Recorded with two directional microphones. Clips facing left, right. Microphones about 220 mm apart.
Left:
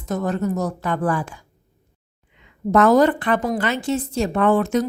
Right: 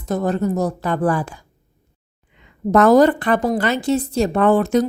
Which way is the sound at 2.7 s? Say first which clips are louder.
Right 3 dB; 40° right (ahead or behind).